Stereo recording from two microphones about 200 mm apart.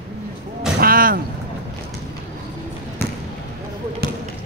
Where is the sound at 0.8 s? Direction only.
45° right (ahead or behind).